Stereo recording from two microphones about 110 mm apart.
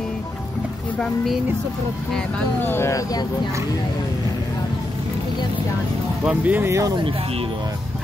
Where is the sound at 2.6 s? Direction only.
20° left (ahead or behind).